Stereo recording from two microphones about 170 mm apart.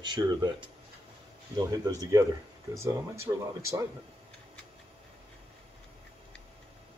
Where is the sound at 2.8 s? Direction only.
15° right (ahead or behind).